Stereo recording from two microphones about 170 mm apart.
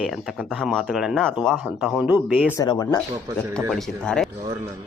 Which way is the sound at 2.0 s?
10° right (ahead or behind).